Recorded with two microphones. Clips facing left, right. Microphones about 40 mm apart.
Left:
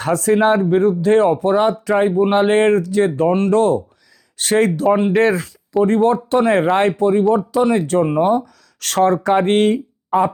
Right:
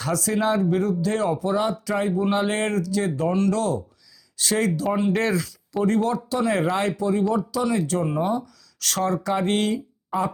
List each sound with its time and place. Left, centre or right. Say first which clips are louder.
0.0 s speech: left 8 dB; left